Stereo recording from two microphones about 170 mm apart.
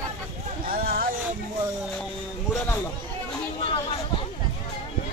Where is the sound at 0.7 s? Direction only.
60° right (ahead or behind).